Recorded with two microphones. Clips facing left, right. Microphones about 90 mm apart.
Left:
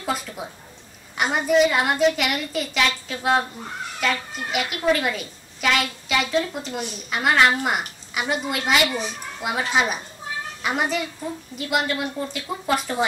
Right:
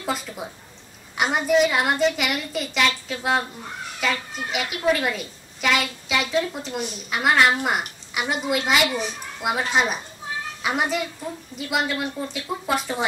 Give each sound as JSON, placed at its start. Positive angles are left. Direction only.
{"t": 0.0, "sound": "a woman's voice", "side_deg": 0}